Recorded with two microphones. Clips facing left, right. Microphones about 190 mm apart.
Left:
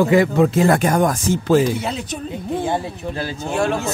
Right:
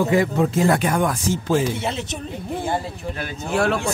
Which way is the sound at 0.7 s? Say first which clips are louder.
Left 3 dB; 45° left (ahead or behind).